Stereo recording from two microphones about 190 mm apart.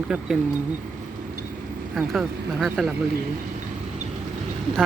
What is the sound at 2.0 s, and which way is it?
Speech, centre (ahead or behind).